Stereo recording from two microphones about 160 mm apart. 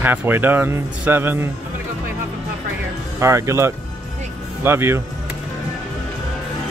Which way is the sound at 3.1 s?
20° right (ahead or behind).